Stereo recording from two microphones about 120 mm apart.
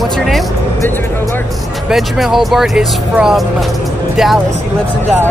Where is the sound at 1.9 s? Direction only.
Centre (ahead or behind).